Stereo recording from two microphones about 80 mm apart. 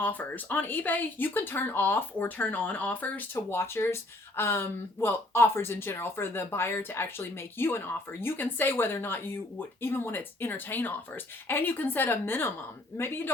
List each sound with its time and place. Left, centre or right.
0.0 s speech: left
3.3 s speech: left